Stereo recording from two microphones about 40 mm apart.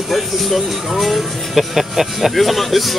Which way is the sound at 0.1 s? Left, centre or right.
Centre.